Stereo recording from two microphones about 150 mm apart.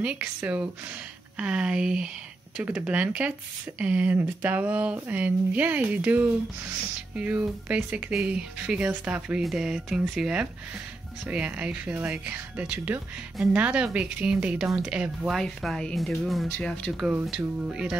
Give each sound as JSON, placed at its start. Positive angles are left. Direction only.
{"t": 0.0, "sound": "speech", "side_deg": -10}
{"t": 16.9, "sound": "speech", "side_deg": -10}